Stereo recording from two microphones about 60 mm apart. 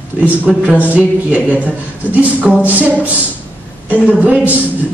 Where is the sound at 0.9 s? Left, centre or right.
Right.